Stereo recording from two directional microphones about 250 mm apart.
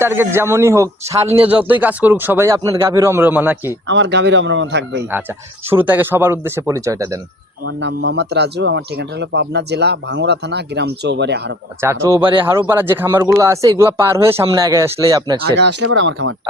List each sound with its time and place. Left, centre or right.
0.0 s speech: centre
3.8 s speech: right
5.7 s speech: centre
7.6 s speech: right
11.8 s speech: centre
15.8 s speech: right